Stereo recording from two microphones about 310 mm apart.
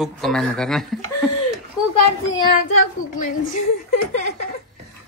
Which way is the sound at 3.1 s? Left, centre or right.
Left.